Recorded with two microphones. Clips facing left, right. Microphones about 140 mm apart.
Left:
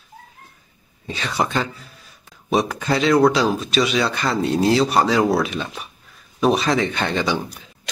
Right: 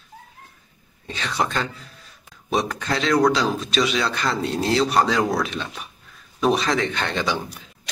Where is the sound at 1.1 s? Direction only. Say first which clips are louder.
Left 2 dB; 5° left (ahead or behind).